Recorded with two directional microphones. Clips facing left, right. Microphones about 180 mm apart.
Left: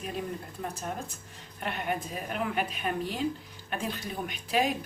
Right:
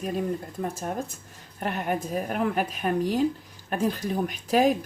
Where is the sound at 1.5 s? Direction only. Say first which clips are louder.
Right 4 dB; 45° right (ahead or behind).